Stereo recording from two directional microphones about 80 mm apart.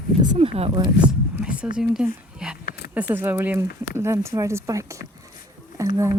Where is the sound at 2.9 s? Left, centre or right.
Right.